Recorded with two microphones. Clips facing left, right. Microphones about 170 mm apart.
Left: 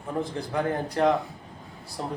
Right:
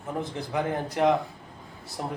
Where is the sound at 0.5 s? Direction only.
20° right (ahead or behind).